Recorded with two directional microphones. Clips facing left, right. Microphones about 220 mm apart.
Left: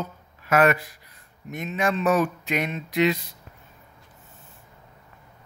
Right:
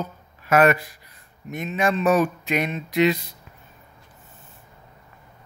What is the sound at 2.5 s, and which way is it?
Speech, 30° right (ahead or behind).